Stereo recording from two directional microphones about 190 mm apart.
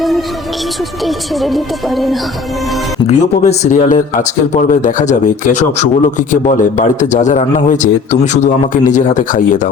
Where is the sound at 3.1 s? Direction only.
35° left (ahead or behind).